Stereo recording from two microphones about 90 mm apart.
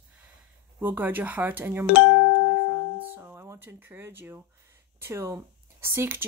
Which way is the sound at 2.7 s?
25° right (ahead or behind).